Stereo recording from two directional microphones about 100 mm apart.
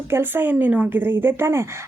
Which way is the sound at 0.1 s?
20° right (ahead or behind).